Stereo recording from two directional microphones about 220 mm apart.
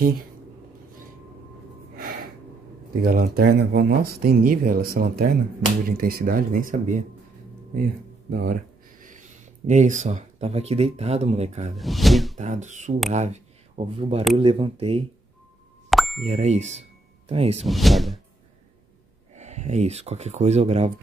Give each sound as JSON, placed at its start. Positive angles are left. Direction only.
{"t": 2.0, "sound": "gasp", "side_deg": -45}
{"t": 3.0, "sound": "speech", "side_deg": -40}
{"t": 11.7, "sound": "speech", "side_deg": 0}
{"t": 12.4, "sound": "speech", "side_deg": -30}
{"t": 15.9, "sound": "plop", "side_deg": 0}
{"t": 16.3, "sound": "speech", "side_deg": -30}
{"t": 17.6, "sound": "speech", "side_deg": 0}
{"t": 19.3, "sound": "speech", "side_deg": -30}